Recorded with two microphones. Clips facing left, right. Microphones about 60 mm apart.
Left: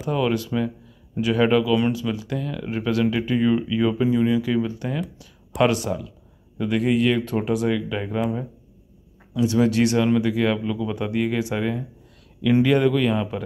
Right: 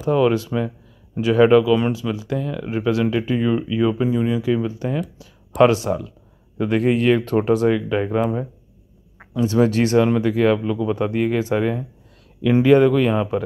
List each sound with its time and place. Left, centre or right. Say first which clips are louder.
0.0 s speech: right 5 dB; right